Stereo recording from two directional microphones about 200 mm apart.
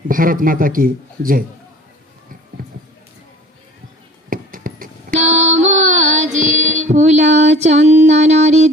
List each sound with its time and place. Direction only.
0.1 s a man's voice: 45° right (ahead or behind)
4.3 s female singing: 45° right (ahead or behind)
6.7 s music: 35° right (ahead or behind)